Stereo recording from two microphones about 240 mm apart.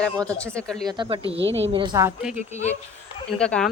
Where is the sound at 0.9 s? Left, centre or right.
Centre.